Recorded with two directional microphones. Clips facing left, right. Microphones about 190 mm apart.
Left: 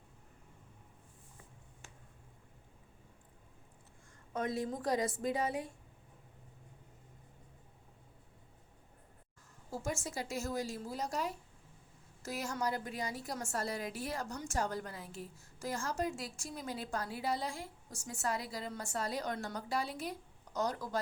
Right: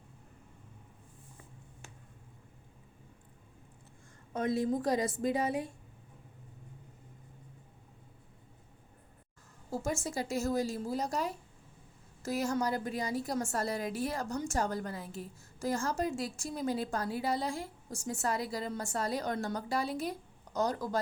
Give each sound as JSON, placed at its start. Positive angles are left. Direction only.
{"t": 4.4, "sound": "a woman's voice", "side_deg": -25}
{"t": 9.8, "sound": "a woman's voice", "side_deg": -35}